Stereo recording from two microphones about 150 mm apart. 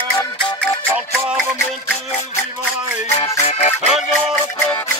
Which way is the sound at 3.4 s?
45° left (ahead or behind).